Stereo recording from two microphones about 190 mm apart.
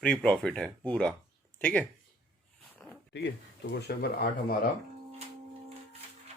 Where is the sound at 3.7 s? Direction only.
55° left (ahead or behind).